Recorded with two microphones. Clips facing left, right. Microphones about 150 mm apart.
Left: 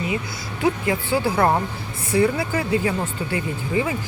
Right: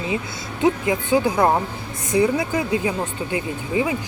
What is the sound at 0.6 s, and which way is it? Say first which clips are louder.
Speech: right 2 dB; 20° right (ahead or behind).